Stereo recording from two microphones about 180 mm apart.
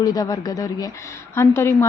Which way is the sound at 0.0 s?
20° left (ahead or behind).